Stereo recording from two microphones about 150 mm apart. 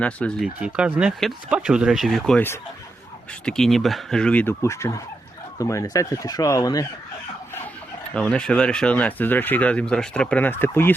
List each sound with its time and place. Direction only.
0.0 s speech: 5° left (ahead or behind)
3.4 s speech: 5° left (ahead or behind); by 6.8 s 25° left (ahead or behind)
8.1 s speech: 5° left (ahead or behind)